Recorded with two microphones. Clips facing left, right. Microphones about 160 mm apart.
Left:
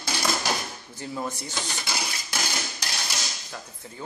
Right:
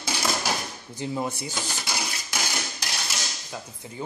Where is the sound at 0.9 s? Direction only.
20° right (ahead or behind).